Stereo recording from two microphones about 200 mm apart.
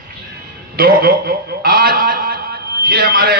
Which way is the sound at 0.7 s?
50° right (ahead or behind).